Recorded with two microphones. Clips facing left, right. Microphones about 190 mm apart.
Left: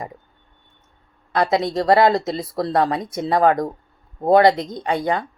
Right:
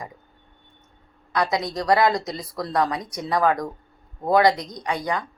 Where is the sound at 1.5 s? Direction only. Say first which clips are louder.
Left 5 dB; 25° left (ahead or behind).